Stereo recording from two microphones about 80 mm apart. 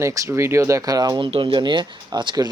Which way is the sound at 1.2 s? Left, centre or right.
Right.